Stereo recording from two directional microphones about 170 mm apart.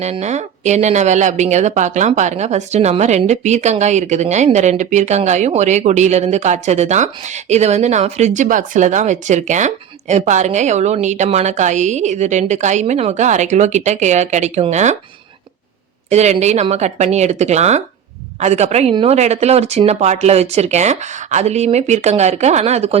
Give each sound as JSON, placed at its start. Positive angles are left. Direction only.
{"t": 0.0, "sound": "speech", "side_deg": -40}
{"t": 16.0, "sound": "speech", "side_deg": -40}